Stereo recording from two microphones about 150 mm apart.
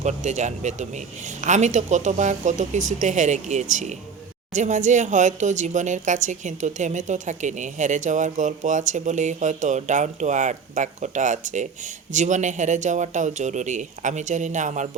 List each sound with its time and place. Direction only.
0.0 s speech: 50° right (ahead or behind)